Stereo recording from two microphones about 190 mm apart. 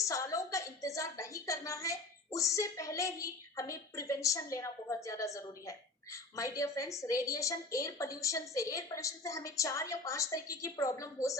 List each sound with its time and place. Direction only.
0.0 s a woman's voice: 15° left (ahead or behind)